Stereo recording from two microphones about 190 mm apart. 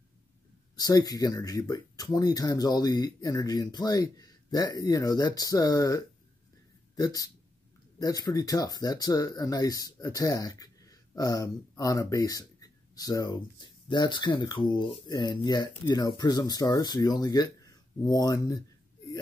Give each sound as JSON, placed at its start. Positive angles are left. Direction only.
{"t": 0.7, "sound": "speech", "side_deg": 20}